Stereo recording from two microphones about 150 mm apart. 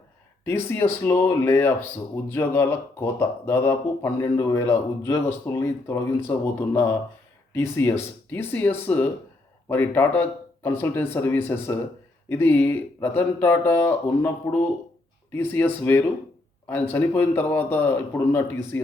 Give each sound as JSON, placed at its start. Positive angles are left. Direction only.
{"t": 0.4, "sound": "speech", "side_deg": 15}